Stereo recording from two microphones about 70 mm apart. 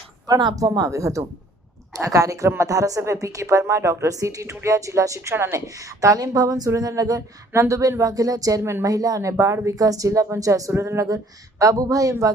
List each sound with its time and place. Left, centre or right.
0.3 s speech: right
0.5 s a woman's voice: right
5.3 s a woman's voice: right
9.6 s a woman's voice: right